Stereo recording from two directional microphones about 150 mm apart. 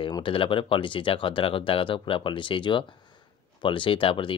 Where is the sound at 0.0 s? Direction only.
35° left (ahead or behind).